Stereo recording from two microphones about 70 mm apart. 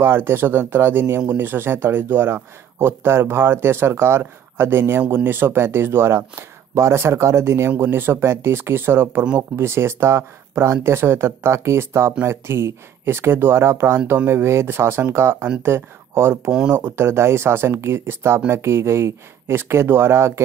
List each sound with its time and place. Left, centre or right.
0.0 s speech: right